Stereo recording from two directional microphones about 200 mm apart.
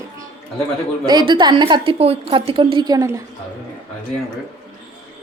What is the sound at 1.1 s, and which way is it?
A woman's voice, 25° right (ahead or behind).